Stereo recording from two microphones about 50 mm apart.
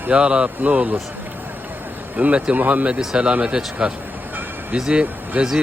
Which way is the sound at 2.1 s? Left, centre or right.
Right.